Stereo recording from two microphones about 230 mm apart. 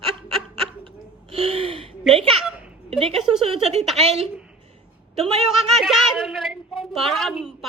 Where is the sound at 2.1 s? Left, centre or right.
Right.